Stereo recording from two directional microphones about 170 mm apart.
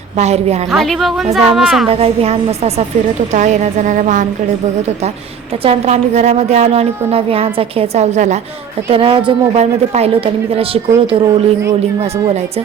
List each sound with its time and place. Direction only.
0.2 s a woman's voice: 40° right (ahead or behind)
0.7 s a woman's voice: centre (ahead or behind)
1.9 s a woman's voice: 35° right (ahead or behind)
5.6 s a woman's voice: 40° right (ahead or behind)
8.9 s a woman's voice: 30° right (ahead or behind)